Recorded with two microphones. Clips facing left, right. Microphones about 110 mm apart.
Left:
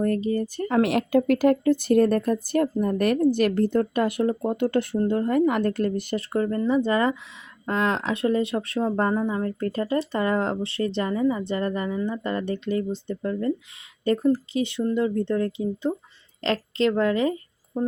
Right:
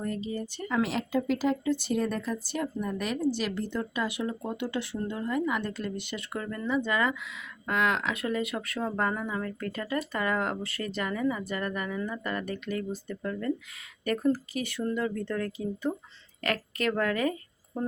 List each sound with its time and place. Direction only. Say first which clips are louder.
0.0 s speech: left 9 dB; 50° left (ahead or behind); by 17.9 s 15° left (ahead or behind)